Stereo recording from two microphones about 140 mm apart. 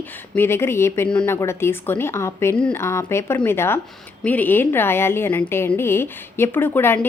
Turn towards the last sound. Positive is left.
turn(degrees=15)  # may be behind; listen again after turning